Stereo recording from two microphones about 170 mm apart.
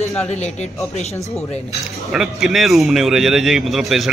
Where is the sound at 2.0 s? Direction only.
Centre (ahead or behind).